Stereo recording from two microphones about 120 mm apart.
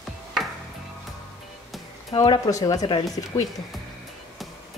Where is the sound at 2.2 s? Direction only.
30° left (ahead or behind).